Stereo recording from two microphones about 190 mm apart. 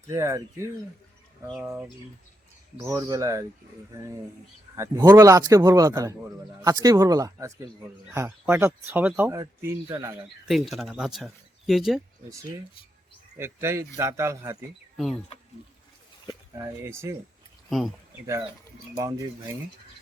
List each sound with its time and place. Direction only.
0.1 s speech: 15° right (ahead or behind)
4.8 s speech: 20° right (ahead or behind)
10.5 s speech: centre (ahead or behind)
13.4 s speech: 15° right (ahead or behind)
14.9 s speech: centre (ahead or behind)
16.6 s speech: 15° right (ahead or behind)
17.7 s speech: centre (ahead or behind)